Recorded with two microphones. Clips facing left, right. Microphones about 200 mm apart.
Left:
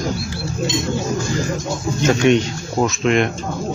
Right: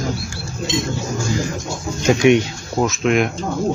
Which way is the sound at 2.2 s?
10° right (ahead or behind).